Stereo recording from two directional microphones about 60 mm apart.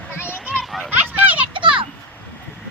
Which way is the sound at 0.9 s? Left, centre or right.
Right.